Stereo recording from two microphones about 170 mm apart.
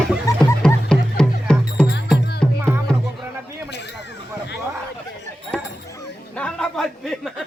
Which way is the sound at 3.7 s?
90° left.